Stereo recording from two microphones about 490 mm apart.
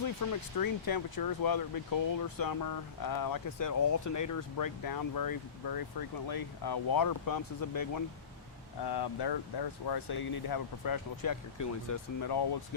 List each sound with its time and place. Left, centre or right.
0.0 s speech: left